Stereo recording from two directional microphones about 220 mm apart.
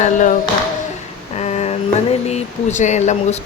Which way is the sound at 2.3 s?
30° left (ahead or behind).